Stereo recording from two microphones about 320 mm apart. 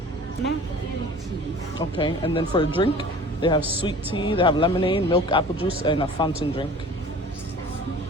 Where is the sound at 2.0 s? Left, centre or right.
Centre.